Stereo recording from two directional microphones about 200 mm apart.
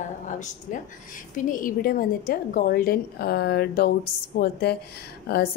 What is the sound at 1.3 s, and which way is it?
A woman's voice, 45° left (ahead or behind).